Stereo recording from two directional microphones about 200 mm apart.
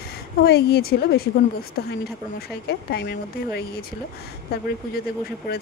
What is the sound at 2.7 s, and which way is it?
Speech, 55° left (ahead or behind).